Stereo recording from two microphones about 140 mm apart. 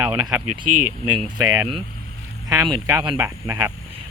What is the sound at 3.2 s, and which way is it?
Speech, 20° right (ahead or behind).